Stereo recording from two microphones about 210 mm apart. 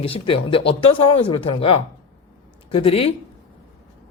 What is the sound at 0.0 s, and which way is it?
A woman's voice, 25° left (ahead or behind).